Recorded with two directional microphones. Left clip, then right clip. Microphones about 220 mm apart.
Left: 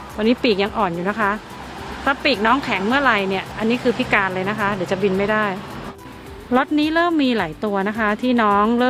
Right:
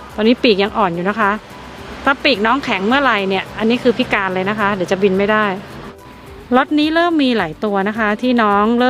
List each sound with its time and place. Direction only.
0.2 s speech: 15° right (ahead or behind)